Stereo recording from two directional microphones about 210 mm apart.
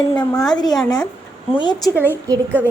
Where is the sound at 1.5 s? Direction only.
20° left (ahead or behind).